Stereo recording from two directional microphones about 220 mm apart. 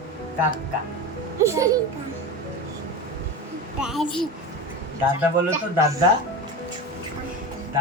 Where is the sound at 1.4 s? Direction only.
15° right (ahead or behind).